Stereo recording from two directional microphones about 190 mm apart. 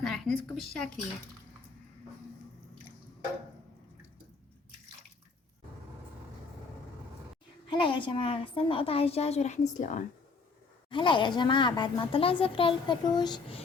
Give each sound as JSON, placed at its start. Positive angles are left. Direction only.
{"t": 0.0, "sound": "a sound", "side_deg": 0}
{"t": 7.7, "sound": "speech", "side_deg": 25}
{"t": 10.8, "sound": "speech", "side_deg": 25}